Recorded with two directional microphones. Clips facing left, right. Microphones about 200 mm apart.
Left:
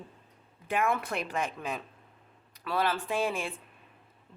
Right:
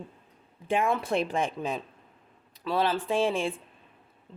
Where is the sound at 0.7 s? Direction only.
25° right (ahead or behind).